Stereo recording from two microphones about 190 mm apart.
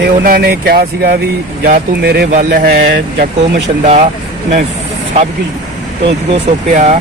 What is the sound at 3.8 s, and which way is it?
Speech, 35° right (ahead or behind).